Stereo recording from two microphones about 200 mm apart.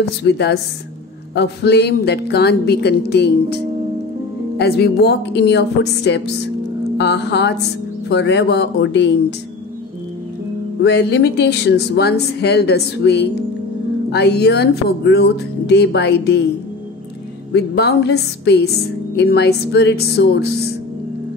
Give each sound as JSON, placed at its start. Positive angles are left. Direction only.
{"t": 0.2, "sound": "speech", "side_deg": 55}
{"t": 4.6, "sound": "speech", "side_deg": 55}
{"t": 10.8, "sound": "speech", "side_deg": 60}
{"t": 17.5, "sound": "speech", "side_deg": 55}